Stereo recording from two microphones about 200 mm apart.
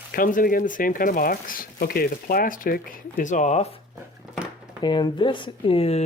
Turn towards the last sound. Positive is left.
turn(degrees=30)  # may be behind; listen again after turning